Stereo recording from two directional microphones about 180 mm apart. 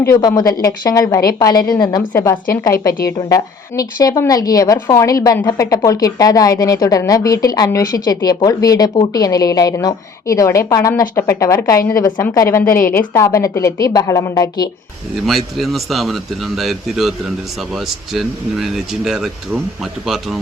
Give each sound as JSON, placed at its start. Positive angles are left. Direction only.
{"t": 0.0, "sound": "a woman's voice", "side_deg": 20}
{"t": 15.1, "sound": "speech", "side_deg": 0}